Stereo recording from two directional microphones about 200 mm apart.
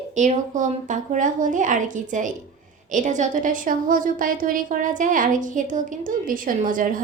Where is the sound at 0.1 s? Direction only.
35° right (ahead or behind).